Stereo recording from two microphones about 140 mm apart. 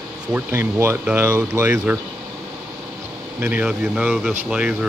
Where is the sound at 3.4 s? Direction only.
10° right (ahead or behind).